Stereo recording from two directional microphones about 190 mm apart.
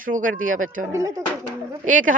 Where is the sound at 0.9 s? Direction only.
15° right (ahead or behind).